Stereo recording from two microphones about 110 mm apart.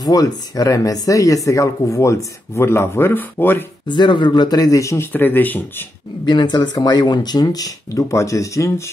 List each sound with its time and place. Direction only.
0.0 s speech: 35° left (ahead or behind); by 3.6 s 20° left (ahead or behind)
3.8 s speech: 45° left (ahead or behind); by 5.9 s 15° left (ahead or behind)
6.2 s speech: 40° left (ahead or behind); by 8.9 s 25° left (ahead or behind)